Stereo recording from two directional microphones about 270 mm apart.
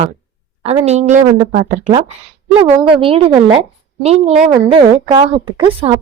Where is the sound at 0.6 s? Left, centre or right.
Right.